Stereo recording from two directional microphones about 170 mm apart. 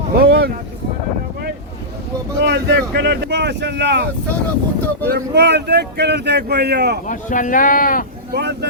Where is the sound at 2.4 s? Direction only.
85° right.